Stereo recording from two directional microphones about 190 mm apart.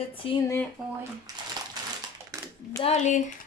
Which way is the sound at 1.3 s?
20° right (ahead or behind).